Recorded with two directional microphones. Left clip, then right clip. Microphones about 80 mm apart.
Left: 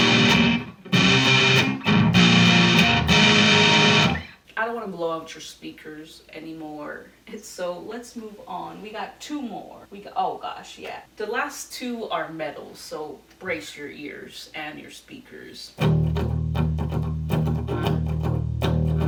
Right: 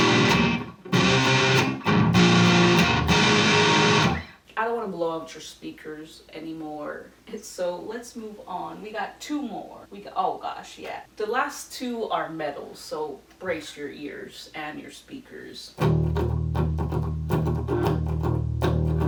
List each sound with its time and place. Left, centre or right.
0.0 s music: right
4.5 s a sound: centre
11.2 s a woman's voice: centre
13.4 s a woman's voice: centre
15.8 s music: right